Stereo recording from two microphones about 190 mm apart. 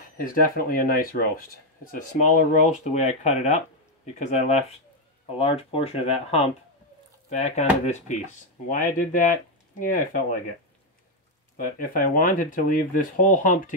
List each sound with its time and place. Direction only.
0.0 s speech: 45° left (ahead or behind)
8.6 s speech: 45° left (ahead or behind)
11.5 s speech: 45° left (ahead or behind)